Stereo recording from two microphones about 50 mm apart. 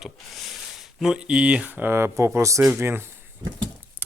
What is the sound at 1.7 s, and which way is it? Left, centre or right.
Speech, right.